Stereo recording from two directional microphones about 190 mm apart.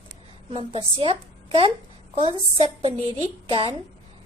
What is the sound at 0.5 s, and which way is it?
Speech, 30° right (ahead or behind).